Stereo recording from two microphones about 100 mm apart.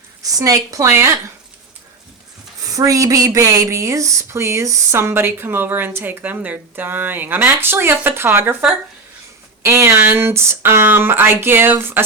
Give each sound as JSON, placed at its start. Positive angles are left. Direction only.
{"t": 0.2, "sound": "a woman's voice", "side_deg": -35}
{"t": 2.7, "sound": "speech", "side_deg": -35}
{"t": 9.6, "sound": "speech", "side_deg": -25}